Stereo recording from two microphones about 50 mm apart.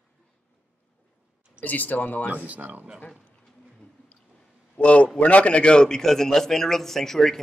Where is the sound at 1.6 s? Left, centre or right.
Left.